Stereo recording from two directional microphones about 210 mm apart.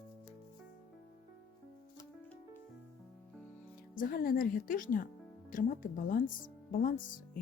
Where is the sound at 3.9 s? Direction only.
40° left (ahead or behind).